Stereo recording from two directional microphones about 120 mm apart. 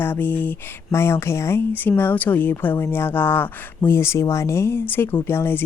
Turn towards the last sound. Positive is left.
turn(degrees=20)  # may be behind; listen again after turning